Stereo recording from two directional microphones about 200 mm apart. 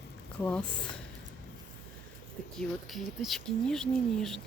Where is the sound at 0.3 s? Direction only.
5° left (ahead or behind).